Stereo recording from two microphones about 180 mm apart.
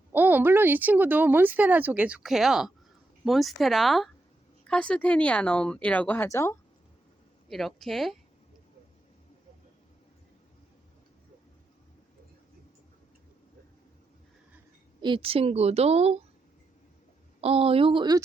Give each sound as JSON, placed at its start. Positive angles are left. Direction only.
{"t": 0.1, "sound": "speech", "side_deg": -10}
{"t": 7.5, "sound": "speech", "side_deg": 0}
{"t": 15.0, "sound": "a woman's voice", "side_deg": -30}
{"t": 17.4, "sound": "a woman's voice", "side_deg": -35}